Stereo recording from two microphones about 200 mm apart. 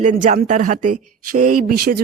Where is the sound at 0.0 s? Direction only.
40° right (ahead or behind).